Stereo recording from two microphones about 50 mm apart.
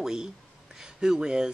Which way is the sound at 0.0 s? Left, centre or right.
Centre.